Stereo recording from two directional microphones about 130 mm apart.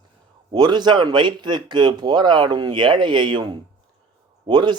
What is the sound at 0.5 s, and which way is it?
Speech, 35° right (ahead or behind).